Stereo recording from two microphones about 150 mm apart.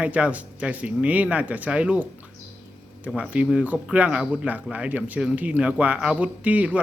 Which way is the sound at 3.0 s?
5° right (ahead or behind).